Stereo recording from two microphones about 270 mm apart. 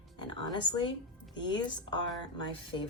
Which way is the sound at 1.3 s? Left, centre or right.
Centre.